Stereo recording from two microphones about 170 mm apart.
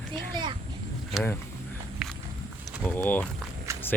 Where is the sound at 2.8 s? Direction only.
10° left (ahead or behind).